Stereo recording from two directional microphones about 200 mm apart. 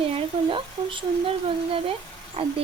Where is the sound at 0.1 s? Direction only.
25° right (ahead or behind).